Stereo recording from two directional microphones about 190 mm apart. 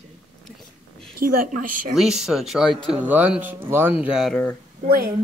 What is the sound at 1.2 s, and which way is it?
Speech, 45° right (ahead or behind).